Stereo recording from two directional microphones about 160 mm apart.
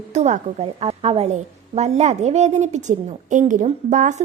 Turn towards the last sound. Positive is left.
turn(degrees=-50)  # may be behind; listen again after turning